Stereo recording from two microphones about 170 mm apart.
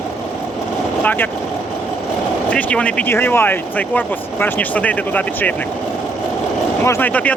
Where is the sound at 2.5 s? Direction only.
10° left (ahead or behind).